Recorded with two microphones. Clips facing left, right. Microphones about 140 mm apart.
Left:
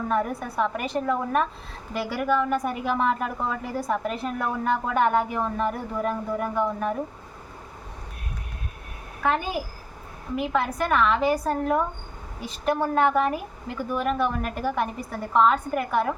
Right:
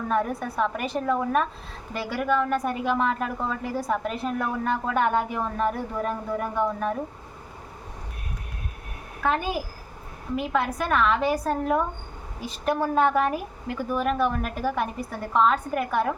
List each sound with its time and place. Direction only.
0.1 s a woman's voice: centre (ahead or behind)
9.2 s a woman's voice: centre (ahead or behind)